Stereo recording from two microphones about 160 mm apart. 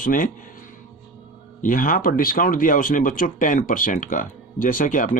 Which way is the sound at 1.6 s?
60° left (ahead or behind).